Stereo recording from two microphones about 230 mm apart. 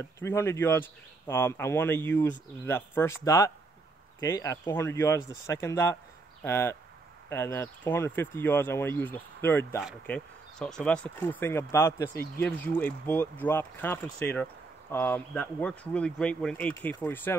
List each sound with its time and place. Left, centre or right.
0.0 s speech: centre